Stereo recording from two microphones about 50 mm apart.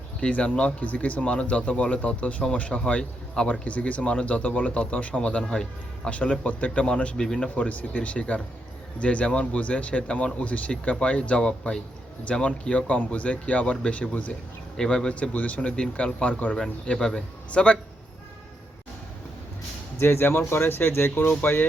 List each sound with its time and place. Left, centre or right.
0.2 s speech: left
3.6 s speech: left; by 7.5 s centre
7.5 s speech: left
14.8 s speech: centre
15.1 s speech: left
15.7 s speech: centre
16.8 s speech: centre
20.0 s speech: left